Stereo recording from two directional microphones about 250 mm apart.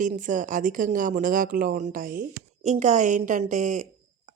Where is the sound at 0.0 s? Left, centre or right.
Right.